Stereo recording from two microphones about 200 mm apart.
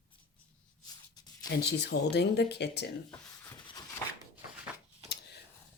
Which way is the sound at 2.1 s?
55° left (ahead or behind).